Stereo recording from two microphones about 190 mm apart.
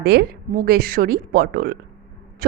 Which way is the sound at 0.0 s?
55° right (ahead or behind).